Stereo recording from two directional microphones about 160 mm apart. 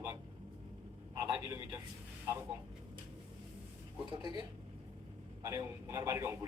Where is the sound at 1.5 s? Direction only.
20° right (ahead or behind).